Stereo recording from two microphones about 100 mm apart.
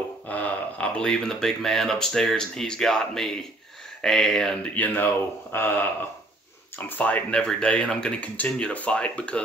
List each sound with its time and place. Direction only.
0.3 s speech: 15° left (ahead or behind)
4.7 s speech: 20° left (ahead or behind)
6.9 s speech: 15° left (ahead or behind)